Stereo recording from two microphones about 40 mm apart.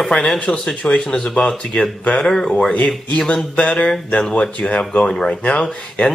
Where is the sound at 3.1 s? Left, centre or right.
Left.